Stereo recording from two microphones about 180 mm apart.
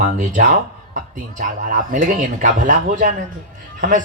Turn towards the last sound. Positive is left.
turn(degrees=-50)  # may be behind; listen again after turning